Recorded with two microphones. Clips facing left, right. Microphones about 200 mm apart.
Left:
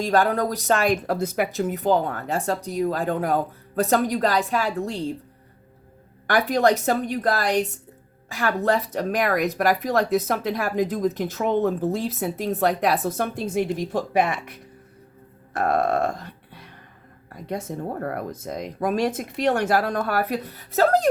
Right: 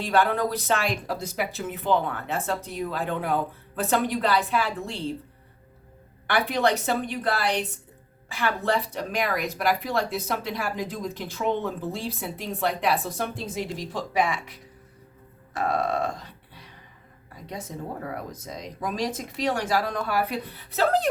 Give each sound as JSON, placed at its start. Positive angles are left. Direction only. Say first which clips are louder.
{"t": 0.0, "sound": "a woman's voice", "louder": "left 3 dB", "side_deg": 40}
{"t": 1.5, "sound": "a woman's voice", "louder": "left 3 dB", "side_deg": 40}
{"t": 6.2, "sound": "speech", "louder": "left 4 dB", "side_deg": 40}
{"t": 15.5, "sound": "music", "louder": "left 4 dB", "side_deg": 55}
{"t": 17.3, "sound": "speech", "louder": "left 6 dB", "side_deg": 55}